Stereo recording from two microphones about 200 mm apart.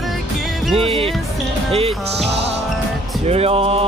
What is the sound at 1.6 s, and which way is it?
Music, 30° right (ahead or behind).